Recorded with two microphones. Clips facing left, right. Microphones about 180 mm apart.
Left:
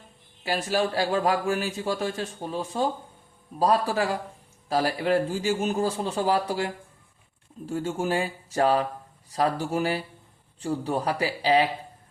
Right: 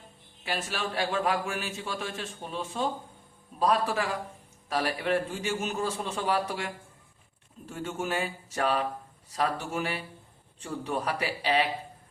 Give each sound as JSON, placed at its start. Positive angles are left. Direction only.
{"t": 0.4, "sound": "a man's voice", "side_deg": 35}
{"t": 7.7, "sound": "a man's voice", "side_deg": 30}